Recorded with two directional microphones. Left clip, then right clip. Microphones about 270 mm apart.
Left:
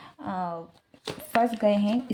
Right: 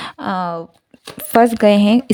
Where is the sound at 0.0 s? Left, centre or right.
Right.